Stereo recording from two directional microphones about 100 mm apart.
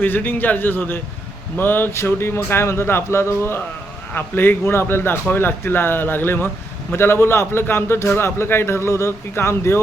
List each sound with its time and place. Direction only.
0.0 s a man's voice: 15° left (ahead or behind)